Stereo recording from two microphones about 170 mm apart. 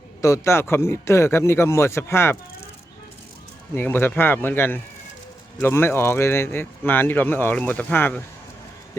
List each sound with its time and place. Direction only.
0.2 s speech: 15° left (ahead or behind)
3.8 s speech: 10° left (ahead or behind)